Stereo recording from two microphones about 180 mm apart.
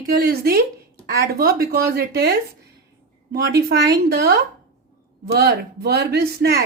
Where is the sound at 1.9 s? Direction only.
60° right (ahead or behind).